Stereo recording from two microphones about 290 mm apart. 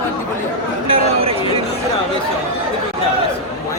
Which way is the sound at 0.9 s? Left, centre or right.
Centre.